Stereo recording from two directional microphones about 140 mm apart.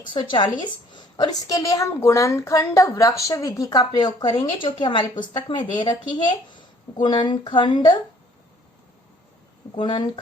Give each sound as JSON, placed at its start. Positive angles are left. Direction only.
{"t": 0.1, "sound": "a woman's voice", "side_deg": 35}
{"t": 9.7, "sound": "speech", "side_deg": 35}